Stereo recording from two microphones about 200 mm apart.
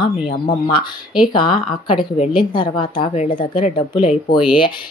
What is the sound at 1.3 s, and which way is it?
Speech, 25° left (ahead or behind).